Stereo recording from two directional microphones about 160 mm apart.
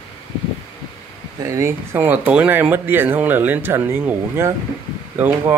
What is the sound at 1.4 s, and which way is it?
Speech, 20° right (ahead or behind).